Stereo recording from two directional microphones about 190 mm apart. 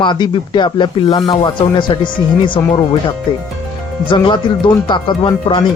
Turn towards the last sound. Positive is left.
turn(degrees=25)  # may be behind; listen again after turning